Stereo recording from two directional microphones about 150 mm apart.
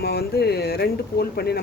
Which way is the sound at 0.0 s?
90° left.